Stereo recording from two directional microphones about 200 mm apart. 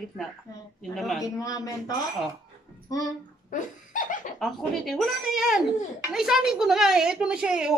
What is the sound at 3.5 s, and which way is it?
Laughter, 40° left (ahead or behind).